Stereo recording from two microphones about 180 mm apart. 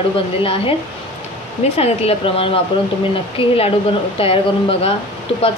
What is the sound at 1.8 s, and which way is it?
Speech, 30° left (ahead or behind).